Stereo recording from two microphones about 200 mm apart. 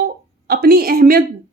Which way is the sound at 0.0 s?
50° right (ahead or behind).